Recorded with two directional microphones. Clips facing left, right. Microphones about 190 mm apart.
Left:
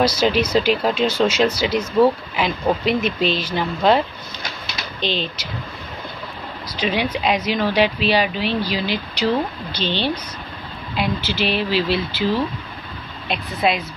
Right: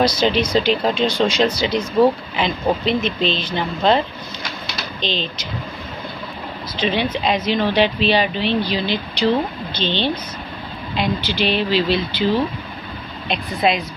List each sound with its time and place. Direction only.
0.0 s a woman's voice: 5° left (ahead or behind)
5.0 s a woman's voice: 10° left (ahead or behind)
6.8 s a woman's voice: 10° left (ahead or behind)
11.2 s speech: 5° left (ahead or behind)
13.3 s speech: 5° left (ahead or behind)